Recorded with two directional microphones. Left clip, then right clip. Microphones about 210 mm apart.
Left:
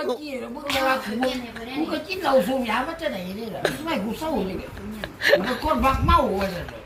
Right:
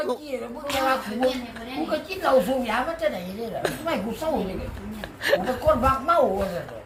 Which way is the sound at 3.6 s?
10° right (ahead or behind).